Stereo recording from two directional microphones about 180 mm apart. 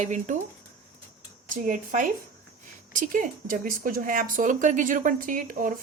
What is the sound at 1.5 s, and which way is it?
Speech, 45° right (ahead or behind).